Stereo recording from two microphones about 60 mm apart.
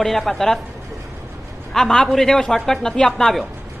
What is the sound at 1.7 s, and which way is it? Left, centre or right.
A woman's voice, centre.